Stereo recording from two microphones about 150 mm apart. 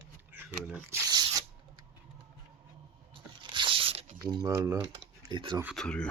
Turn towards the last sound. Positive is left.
turn(degrees=5)  # may be behind; listen again after turning